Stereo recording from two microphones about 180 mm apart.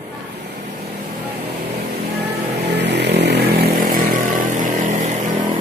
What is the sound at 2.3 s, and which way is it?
Vehicle, 70° right (ahead or behind).